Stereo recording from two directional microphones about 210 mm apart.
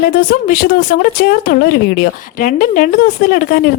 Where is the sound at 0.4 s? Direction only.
45° left (ahead or behind).